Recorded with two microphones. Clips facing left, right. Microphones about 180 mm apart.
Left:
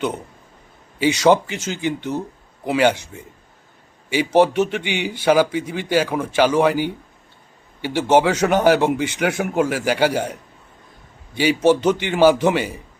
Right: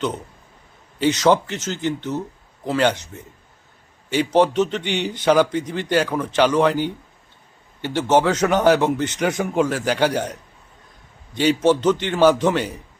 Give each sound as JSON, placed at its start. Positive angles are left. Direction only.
{"t": 0.9, "sound": "a man's voice", "side_deg": 10}
{"t": 11.3, "sound": "a man's voice", "side_deg": 10}